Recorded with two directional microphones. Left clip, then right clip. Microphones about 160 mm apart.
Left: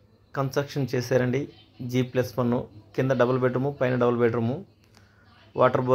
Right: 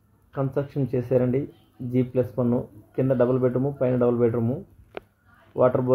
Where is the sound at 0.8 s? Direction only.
5° left (ahead or behind).